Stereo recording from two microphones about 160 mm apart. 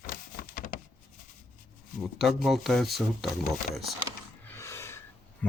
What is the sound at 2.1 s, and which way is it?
Speech, centre (ahead or behind).